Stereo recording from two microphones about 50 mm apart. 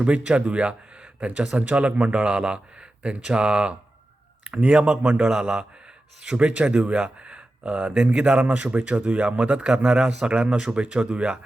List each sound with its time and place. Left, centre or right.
0.3 s a man's voice: right
5.2 s speech: centre
6.3 s a man's voice: right